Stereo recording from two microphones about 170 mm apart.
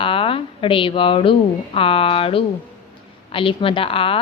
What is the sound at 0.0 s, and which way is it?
A woman's voice, 30° left (ahead or behind).